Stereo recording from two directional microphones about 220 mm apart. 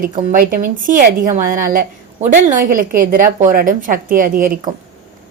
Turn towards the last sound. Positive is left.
turn(degrees=-40)  # may be behind; listen again after turning